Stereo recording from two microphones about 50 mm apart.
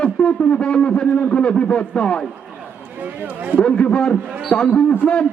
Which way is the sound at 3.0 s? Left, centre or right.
Right.